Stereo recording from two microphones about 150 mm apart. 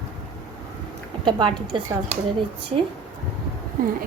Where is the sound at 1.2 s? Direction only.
35° right (ahead or behind).